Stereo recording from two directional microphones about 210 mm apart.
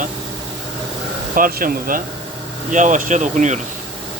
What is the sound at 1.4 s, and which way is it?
Speech, 40° right (ahead or behind).